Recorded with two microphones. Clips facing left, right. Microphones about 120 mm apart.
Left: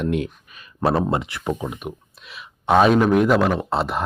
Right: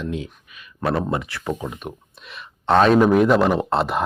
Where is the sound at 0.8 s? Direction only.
30° left (ahead or behind).